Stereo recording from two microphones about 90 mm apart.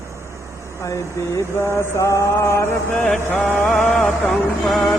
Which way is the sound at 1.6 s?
30° left (ahead or behind).